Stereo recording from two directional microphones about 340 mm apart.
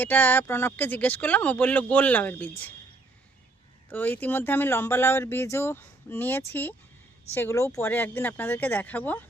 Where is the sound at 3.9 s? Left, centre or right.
Centre.